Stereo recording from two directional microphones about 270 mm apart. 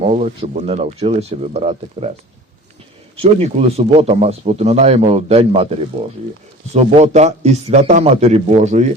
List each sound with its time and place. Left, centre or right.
0.0 s speech: right
3.2 s speech: right